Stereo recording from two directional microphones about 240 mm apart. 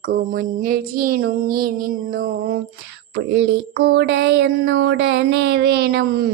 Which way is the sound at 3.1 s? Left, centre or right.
Right.